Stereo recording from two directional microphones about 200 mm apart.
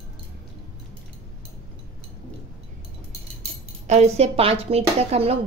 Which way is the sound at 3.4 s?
35° right (ahead or behind).